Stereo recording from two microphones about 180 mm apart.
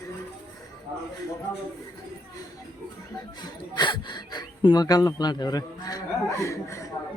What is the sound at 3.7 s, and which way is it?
A man's voice, 25° left (ahead or behind).